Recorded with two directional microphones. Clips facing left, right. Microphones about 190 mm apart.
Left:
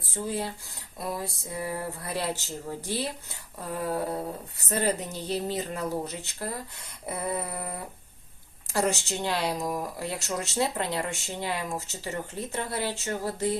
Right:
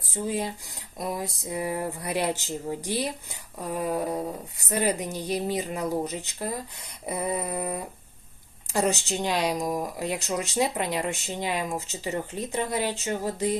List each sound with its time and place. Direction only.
0.1 s speech: 15° right (ahead or behind)